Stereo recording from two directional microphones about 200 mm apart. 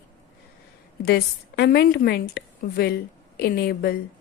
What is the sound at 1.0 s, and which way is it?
A woman's voice, 55° left (ahead or behind).